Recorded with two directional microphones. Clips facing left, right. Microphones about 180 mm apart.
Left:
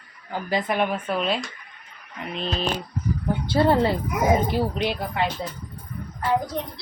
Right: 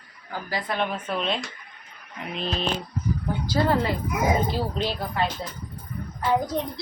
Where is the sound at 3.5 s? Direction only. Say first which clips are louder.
Left 4 dB; 30° left (ahead or behind).